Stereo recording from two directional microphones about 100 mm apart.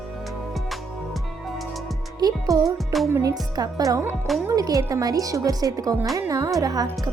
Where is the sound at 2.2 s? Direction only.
40° right (ahead or behind).